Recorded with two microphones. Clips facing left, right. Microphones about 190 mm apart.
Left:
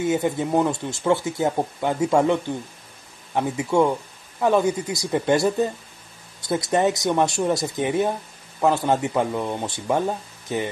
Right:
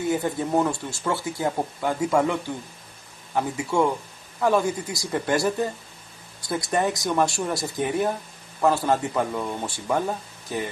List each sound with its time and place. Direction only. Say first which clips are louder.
0.1 s speech: even; 20° left (ahead or behind)